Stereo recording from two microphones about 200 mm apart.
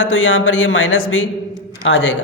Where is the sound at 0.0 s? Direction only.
70° left (ahead or behind).